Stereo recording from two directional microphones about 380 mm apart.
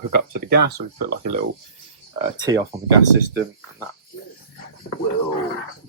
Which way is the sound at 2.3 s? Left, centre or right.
Centre.